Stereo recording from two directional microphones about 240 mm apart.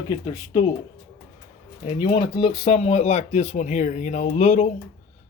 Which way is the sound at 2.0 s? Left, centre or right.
Centre.